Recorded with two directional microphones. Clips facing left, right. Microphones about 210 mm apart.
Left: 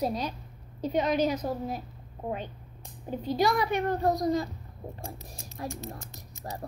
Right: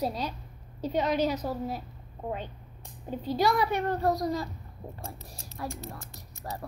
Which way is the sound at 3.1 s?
15° left (ahead or behind).